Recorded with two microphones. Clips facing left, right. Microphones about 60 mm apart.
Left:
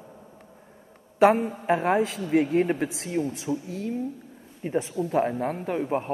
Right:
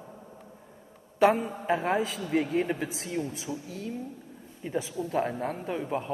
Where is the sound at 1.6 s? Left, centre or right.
Left.